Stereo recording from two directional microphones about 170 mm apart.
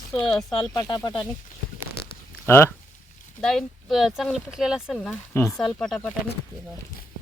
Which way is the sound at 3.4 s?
Centre (ahead or behind).